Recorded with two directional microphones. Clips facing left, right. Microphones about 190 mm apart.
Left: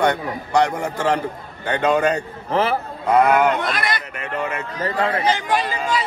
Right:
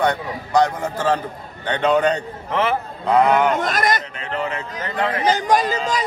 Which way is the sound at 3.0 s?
Centre (ahead or behind).